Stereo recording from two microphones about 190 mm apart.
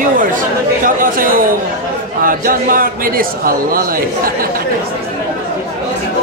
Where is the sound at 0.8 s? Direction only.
45° right (ahead or behind).